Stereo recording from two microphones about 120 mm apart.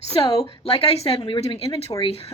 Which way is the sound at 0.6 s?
55° left (ahead or behind).